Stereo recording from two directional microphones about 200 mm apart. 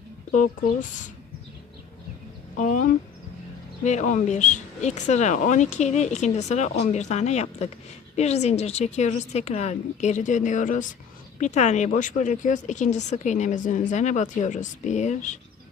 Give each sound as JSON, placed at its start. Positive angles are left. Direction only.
{"t": 0.3, "sound": "speech", "side_deg": 40}
{"t": 2.6, "sound": "speech", "side_deg": 40}